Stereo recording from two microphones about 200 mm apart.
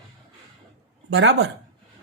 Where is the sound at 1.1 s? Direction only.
60° right (ahead or behind).